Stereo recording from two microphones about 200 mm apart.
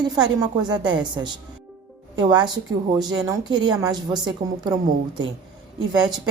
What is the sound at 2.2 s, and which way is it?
A woman's voice, 20° right (ahead or behind).